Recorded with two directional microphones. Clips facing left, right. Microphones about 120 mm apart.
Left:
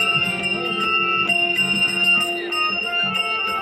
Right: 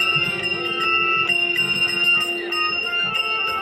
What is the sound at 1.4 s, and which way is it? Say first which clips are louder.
Music: left 3 dB; 45° left (ahead or behind).